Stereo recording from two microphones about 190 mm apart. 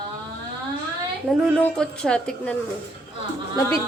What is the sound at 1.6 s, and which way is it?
Speech, 5° left (ahead or behind).